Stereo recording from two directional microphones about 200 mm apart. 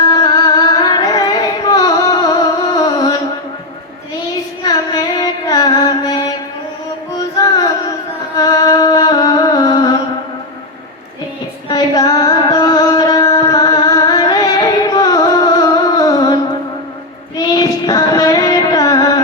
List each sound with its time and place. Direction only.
0.0 s carnatic music: 20° left (ahead or behind)
4.6 s music: 20° left (ahead or behind)
8.4 s music: 20° left (ahead or behind)
11.7 s music: 20° left (ahead or behind)